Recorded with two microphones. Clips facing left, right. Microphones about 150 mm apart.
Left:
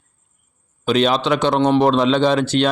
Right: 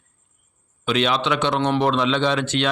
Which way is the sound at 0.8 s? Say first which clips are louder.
Left 4 dB; 40° left (ahead or behind).